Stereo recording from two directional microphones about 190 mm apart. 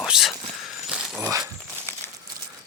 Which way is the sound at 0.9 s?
5° right (ahead or behind).